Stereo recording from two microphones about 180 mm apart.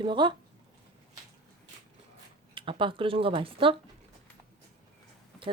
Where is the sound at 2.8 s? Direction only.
30° right (ahead or behind).